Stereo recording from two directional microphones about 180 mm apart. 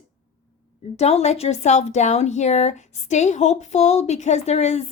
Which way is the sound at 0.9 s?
35° left (ahead or behind).